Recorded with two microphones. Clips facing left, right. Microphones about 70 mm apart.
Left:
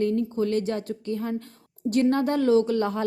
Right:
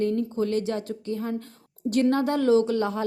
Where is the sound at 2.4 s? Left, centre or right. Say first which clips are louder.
Even; left.